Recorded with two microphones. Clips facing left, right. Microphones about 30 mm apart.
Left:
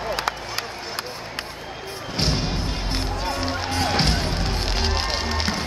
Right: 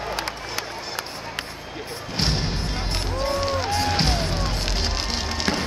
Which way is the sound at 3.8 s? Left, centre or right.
Left.